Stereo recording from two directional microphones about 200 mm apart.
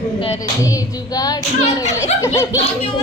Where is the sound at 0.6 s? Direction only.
15° left (ahead or behind).